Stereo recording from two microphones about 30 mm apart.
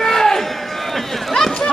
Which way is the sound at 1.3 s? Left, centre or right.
Centre.